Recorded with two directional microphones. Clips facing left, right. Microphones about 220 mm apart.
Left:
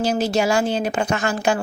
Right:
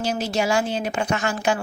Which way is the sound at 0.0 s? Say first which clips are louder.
Left 4 dB; 35° left (ahead or behind).